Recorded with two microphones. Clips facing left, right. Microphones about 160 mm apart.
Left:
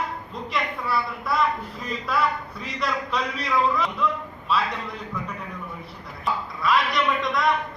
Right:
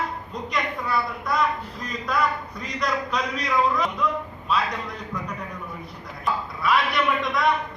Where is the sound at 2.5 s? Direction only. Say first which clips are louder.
Right 1 dB; 5° left (ahead or behind).